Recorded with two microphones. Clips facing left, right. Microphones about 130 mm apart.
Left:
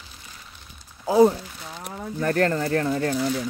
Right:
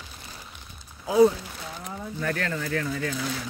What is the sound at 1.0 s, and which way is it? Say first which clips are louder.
Speech: left 2 dB; 35° left (ahead or behind).